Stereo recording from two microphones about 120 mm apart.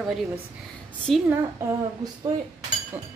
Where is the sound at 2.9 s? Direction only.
15° right (ahead or behind).